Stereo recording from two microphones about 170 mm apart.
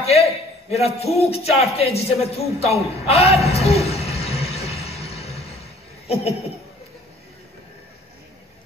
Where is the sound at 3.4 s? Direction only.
35° left (ahead or behind).